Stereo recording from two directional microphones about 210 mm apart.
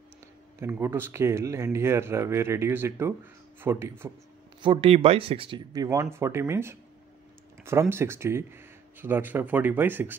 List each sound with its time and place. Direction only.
0.6 s speech: 10° right (ahead or behind)
4.6 s speech: 25° right (ahead or behind)
7.9 s speech: 10° right (ahead or behind)